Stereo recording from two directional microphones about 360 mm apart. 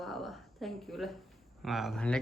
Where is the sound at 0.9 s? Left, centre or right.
Centre.